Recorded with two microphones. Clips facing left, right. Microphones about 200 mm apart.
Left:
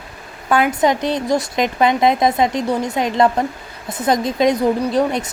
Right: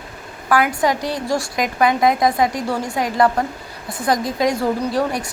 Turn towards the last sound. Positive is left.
turn(degrees=20)  # may be behind; listen again after turning